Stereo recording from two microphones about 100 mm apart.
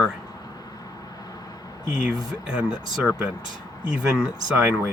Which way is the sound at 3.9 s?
5° right (ahead or behind).